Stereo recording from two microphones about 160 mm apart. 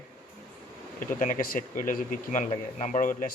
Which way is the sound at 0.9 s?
60° left (ahead or behind).